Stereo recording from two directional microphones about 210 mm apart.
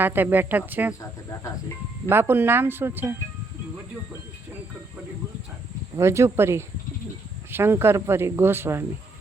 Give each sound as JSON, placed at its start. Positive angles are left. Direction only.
{"t": 0.0, "sound": "speech", "side_deg": -10}
{"t": 2.0, "sound": "speech", "side_deg": -10}
{"t": 6.0, "sound": "speech", "side_deg": -10}